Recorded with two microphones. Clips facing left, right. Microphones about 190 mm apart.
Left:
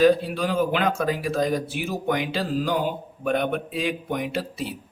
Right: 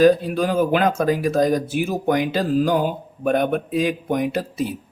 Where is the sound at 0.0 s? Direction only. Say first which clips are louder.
Right 3 dB; 45° right (ahead or behind).